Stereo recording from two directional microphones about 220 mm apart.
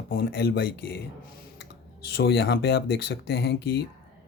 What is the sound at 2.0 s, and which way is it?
Speech, 45° left (ahead or behind).